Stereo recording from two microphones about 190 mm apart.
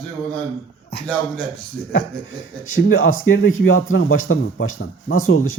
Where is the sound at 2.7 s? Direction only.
90° left.